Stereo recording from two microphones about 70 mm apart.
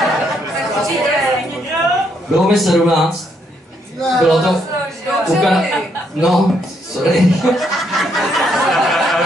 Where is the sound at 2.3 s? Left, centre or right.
Centre.